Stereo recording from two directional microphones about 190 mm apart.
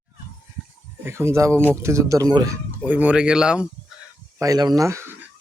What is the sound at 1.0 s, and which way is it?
Speech, 15° right (ahead or behind).